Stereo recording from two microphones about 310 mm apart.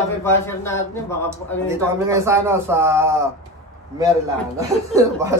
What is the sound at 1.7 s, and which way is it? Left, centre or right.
A man's voice, centre.